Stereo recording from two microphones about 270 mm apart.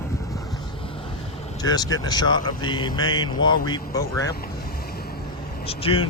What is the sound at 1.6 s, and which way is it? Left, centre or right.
Speech, centre.